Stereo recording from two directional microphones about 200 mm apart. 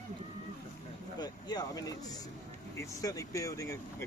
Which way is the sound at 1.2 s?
20° left (ahead or behind).